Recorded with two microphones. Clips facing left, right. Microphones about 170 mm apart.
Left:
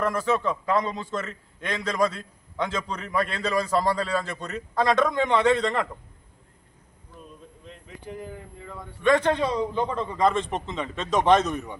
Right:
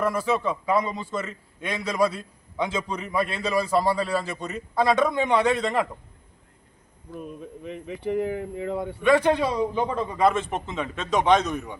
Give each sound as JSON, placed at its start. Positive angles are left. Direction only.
{"t": 0.0, "sound": "a man's voice", "side_deg": -10}
{"t": 7.6, "sound": "speech", "side_deg": -70}
{"t": 9.0, "sound": "a man's voice", "side_deg": -10}